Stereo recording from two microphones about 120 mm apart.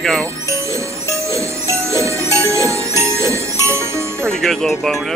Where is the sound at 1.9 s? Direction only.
25° right (ahead or behind).